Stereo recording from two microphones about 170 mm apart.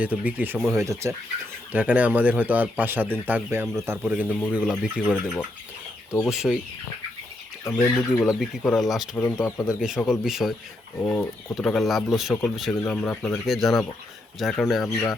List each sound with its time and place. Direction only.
0.0 s speech: 10° right (ahead or behind)
4.3 s speech: 10° left (ahead or behind)
4.5 s speech: 5° right (ahead or behind)
7.6 s speech: 10° left (ahead or behind)
9.6 s speech: 5° right (ahead or behind)
11.0 s speech: 10° left (ahead or behind)